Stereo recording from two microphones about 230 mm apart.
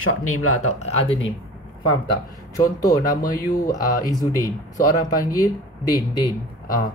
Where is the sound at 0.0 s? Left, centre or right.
Left.